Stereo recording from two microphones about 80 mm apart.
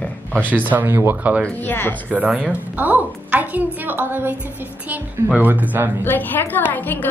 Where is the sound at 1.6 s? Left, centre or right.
Left.